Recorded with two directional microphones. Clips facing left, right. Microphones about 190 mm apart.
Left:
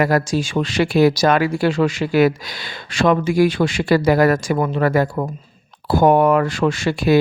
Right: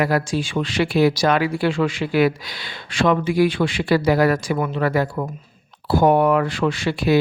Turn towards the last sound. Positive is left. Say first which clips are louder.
# left 2 dB
turn(degrees=45)  # may be behind; listen again after turning